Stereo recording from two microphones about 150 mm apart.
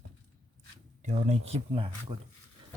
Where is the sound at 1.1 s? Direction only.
40° right (ahead or behind).